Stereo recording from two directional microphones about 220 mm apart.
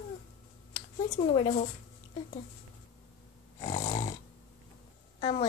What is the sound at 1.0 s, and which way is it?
Speech, 30° left (ahead or behind).